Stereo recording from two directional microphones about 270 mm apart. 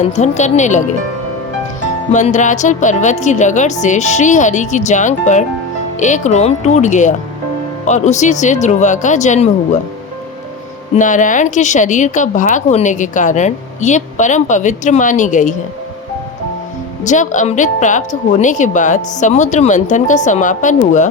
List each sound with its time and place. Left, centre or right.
0.2 s speech: left
2.1 s speech: left
10.9 s speech: left
17.0 s speech: left